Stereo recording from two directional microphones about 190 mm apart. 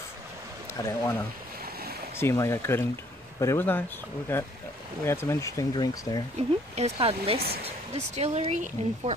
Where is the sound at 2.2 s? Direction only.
15° left (ahead or behind).